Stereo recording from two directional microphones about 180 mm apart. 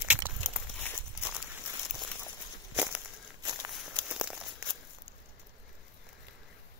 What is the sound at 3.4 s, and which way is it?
Walk, 20° right (ahead or behind).